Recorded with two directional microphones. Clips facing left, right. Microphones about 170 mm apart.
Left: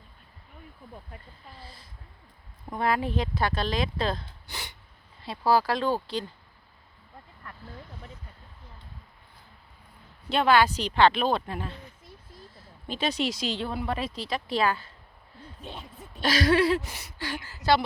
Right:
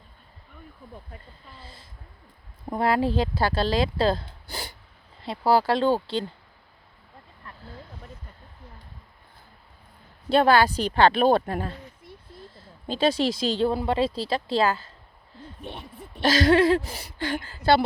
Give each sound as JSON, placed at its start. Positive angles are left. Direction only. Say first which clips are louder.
{"t": 2.6, "sound": "speech", "louder": "right 4 dB", "side_deg": -30}
{"t": 10.2, "sound": "speech", "louder": "right 3 dB", "side_deg": -35}
{"t": 11.3, "sound": "speech", "louder": "right 7 dB", "side_deg": -50}
{"t": 12.5, "sound": "speech", "louder": "right 6 dB", "side_deg": -30}
{"t": 15.7, "sound": "speech", "louder": "right 2 dB", "side_deg": -60}
{"t": 16.4, "sound": "speech", "louder": "right 3 dB", "side_deg": -25}
{"t": 17.2, "sound": "speech", "louder": "right 6 dB", "side_deg": -50}